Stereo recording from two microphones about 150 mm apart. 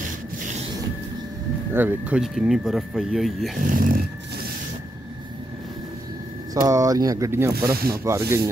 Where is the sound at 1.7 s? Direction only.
10° right (ahead or behind).